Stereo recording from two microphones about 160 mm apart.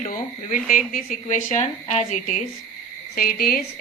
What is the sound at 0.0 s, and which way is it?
A woman's voice, 55° left (ahead or behind).